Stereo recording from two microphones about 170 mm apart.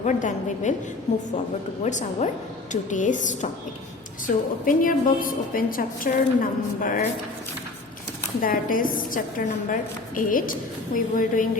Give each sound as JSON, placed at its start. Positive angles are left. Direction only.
{"t": 0.0, "sound": "a woman's voice", "side_deg": 45}
{"t": 1.8, "sound": "a woman's voice", "side_deg": 45}
{"t": 8.4, "sound": "a woman's voice", "side_deg": 55}